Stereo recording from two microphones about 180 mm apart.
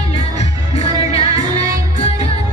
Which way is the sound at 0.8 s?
35° left (ahead or behind).